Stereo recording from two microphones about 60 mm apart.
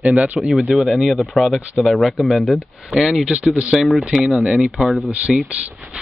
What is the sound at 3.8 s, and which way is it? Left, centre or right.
Speech, centre.